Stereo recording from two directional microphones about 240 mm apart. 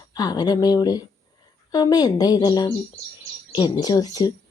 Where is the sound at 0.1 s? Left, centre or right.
Centre.